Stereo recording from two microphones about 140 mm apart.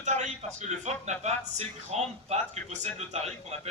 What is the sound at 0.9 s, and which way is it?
A man's voice, 55° right (ahead or behind).